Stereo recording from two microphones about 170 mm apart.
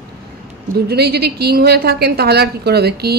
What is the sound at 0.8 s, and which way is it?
A woman's voice, 70° right (ahead or behind).